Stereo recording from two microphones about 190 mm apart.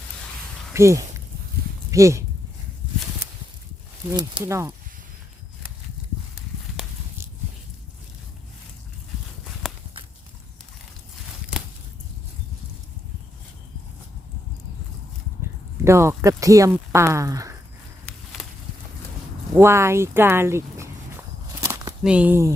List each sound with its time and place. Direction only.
0.7 s speech: 15° right (ahead or behind)
4.1 s speech: 20° right (ahead or behind)
9.6 s clip-clop: centre (ahead or behind)
15.4 s speech: 15° right (ahead or behind)
19.5 s speech: 15° right (ahead or behind)
21.6 s a sound: 15° right (ahead or behind)
22.0 s speech: 5° right (ahead or behind)